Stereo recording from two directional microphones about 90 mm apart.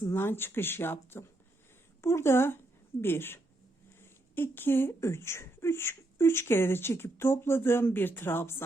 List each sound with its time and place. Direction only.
0.1 s speech: 25° left (ahead or behind)
4.0 s a sound: 25° left (ahead or behind)
4.9 s speech: 30° left (ahead or behind)